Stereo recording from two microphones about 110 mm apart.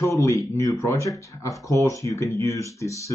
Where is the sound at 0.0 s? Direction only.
25° left (ahead or behind).